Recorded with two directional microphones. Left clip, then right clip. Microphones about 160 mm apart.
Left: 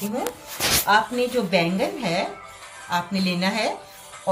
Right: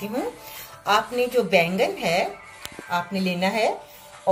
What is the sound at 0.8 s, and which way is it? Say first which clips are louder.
Speech: right 1 dB; 15° right (ahead or behind).